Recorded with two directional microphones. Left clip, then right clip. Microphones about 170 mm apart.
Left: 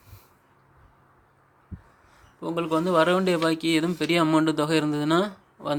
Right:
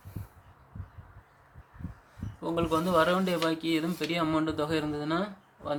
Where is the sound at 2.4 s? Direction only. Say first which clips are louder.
Left 3 dB; 30° left (ahead or behind).